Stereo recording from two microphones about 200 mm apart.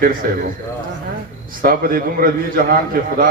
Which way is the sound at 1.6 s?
45° right (ahead or behind).